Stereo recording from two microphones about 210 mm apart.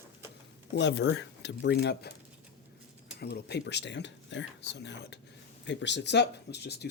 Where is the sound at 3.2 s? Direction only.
50° left (ahead or behind).